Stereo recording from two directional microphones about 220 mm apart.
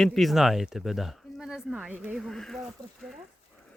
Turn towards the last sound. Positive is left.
turn(degrees=0)  # may be behind; listen again after turning